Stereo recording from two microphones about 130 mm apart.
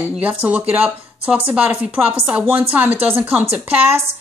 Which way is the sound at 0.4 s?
10° right (ahead or behind).